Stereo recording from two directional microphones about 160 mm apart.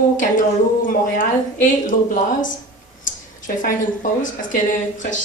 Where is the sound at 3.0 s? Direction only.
55° left (ahead or behind).